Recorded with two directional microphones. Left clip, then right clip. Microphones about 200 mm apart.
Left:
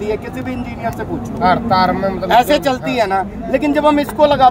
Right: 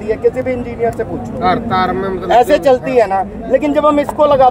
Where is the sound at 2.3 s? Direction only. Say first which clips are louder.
Right 2 dB; 15° right (ahead or behind).